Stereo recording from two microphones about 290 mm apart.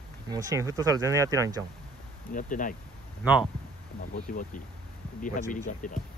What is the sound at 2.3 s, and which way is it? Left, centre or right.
Speech, left.